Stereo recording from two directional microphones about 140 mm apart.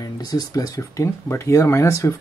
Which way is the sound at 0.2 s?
25° left (ahead or behind).